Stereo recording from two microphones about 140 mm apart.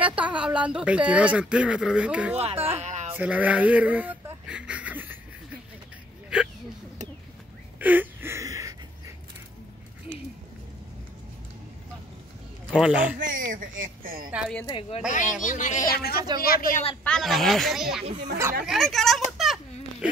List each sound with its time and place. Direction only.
0.0 s speech: 10° right (ahead or behind)
2.3 s speech: 45° right (ahead or behind)
2.8 s a sound: 55° right (ahead or behind)
3.1 s speech: 10° right (ahead or behind)
7.8 s gasp: 10° right (ahead or behind)
12.8 s speech: 10° right (ahead or behind)
13.2 s speech: 70° right (ahead or behind); by 14.3 s 90° right
14.7 s a woman's voice: 40° left (ahead or behind)
15.0 s speech: 60° left (ahead or behind)
15.9 s speech: 90° left
17.0 s speech: 5° left (ahead or behind)
18.7 s a sound: centre (ahead or behind)